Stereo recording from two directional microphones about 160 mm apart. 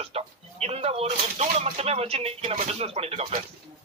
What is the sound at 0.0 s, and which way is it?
Speech, 40° right (ahead or behind).